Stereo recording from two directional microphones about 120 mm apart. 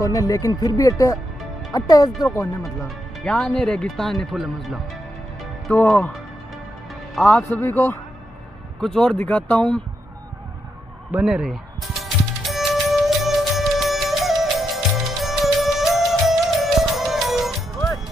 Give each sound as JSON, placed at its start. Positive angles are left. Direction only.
{"t": 0.0, "sound": "a man's voice", "side_deg": 30}
{"t": 3.3, "sound": "speech", "side_deg": 10}
{"t": 7.2, "sound": "speech", "side_deg": -5}
{"t": 7.6, "sound": "a man's voice", "side_deg": 20}
{"t": 8.8, "sound": "speech", "side_deg": 5}
{"t": 11.1, "sound": "music", "side_deg": -10}